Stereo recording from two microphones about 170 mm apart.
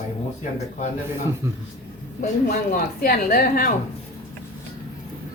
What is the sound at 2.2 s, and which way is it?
A woman's voice, 50° left (ahead or behind).